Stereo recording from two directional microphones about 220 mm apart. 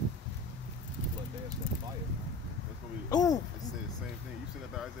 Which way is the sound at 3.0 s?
15° left (ahead or behind).